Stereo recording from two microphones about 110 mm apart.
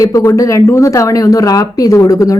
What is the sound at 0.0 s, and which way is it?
A woman's voice, 30° left (ahead or behind).